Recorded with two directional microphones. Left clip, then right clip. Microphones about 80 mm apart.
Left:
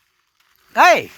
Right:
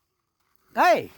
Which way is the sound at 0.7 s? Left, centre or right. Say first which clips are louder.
Left 7 dB; left.